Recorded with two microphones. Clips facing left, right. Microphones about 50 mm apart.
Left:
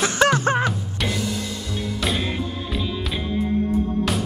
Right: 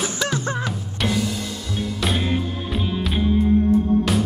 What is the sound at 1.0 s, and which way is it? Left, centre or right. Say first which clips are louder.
Music: right 3 dB; centre.